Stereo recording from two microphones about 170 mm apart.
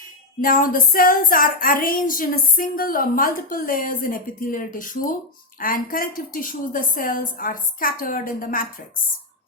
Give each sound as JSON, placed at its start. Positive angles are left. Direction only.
{"t": 0.4, "sound": "a woman's voice", "side_deg": 55}